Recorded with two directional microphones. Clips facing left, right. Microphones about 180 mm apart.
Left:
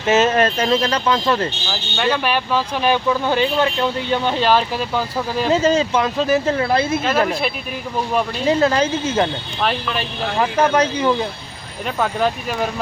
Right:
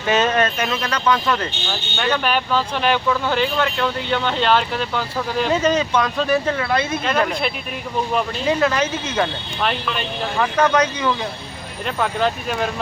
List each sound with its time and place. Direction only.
0.0 s speech: 25° left (ahead or behind)
2.0 s speech: 5° left (ahead or behind)
5.5 s speech: 25° left (ahead or behind)
7.0 s speech: 5° left (ahead or behind)
8.4 s speech: 30° left (ahead or behind)
9.6 s speech: centre (ahead or behind)
10.4 s speech: 30° left (ahead or behind)
11.9 s speech: 5° left (ahead or behind)